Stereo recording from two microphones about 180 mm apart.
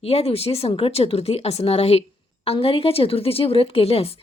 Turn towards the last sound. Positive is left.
turn(degrees=35)  # may be behind; listen again after turning